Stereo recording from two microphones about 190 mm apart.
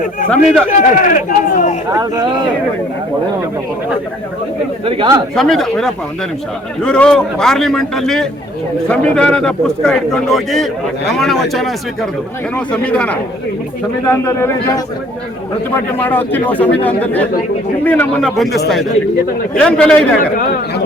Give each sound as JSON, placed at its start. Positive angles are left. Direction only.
{"t": 0.3, "sound": "speech", "side_deg": 5}
{"t": 0.8, "sound": "speech", "side_deg": 45}
{"t": 5.3, "sound": "a man's voice", "side_deg": 0}
{"t": 15.7, "sound": "a man's voice", "side_deg": 10}